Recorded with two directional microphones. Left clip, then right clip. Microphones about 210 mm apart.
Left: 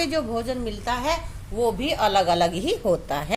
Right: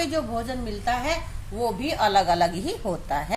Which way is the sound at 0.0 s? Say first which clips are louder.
Left 2 dB; 25° left (ahead or behind).